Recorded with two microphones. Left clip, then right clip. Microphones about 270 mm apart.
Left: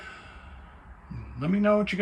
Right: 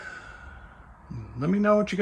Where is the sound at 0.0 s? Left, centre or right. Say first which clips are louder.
Right 4 dB; centre.